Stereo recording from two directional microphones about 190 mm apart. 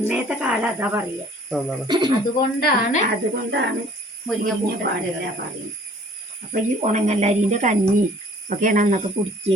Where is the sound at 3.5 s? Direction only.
65° right (ahead or behind).